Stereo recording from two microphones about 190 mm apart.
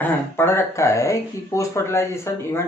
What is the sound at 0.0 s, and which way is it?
Speech, 10° left (ahead or behind).